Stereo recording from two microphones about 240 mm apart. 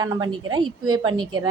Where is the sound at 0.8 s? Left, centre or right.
Right.